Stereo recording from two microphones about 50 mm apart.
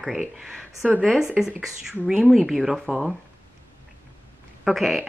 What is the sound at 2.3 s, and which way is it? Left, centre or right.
Speech, centre.